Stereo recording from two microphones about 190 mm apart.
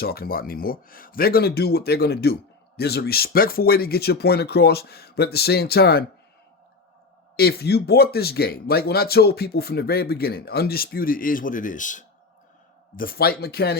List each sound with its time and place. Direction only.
0.0 s speech: 55° left (ahead or behind)
7.3 s speech: 55° left (ahead or behind)
13.0 s speech: 50° left (ahead or behind)